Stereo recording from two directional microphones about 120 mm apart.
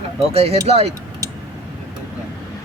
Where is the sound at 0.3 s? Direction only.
55° right (ahead or behind).